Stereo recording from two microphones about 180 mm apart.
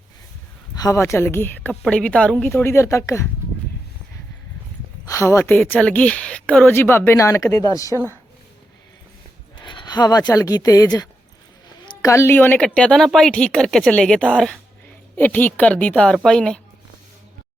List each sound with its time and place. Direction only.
0.8 s a woman's voice: 15° left (ahead or behind)
5.0 s a woman's voice: 15° left (ahead or behind)
9.6 s a sound: 25° left (ahead or behind)
10.3 s a woman's voice: 20° left (ahead or behind); by 16.6 s 5° left (ahead or behind)